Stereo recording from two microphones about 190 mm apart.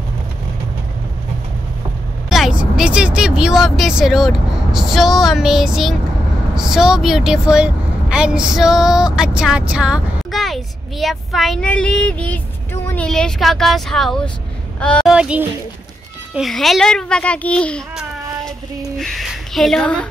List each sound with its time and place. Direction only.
2.2 s vehicle: centre (ahead or behind)
2.6 s a woman's voice: 5° right (ahead or behind)
18.9 s a sound: centre (ahead or behind)